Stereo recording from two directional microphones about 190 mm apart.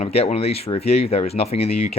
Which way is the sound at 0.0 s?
35° left (ahead or behind).